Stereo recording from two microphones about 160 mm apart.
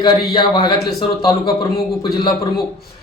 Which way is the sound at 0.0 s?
25° left (ahead or behind).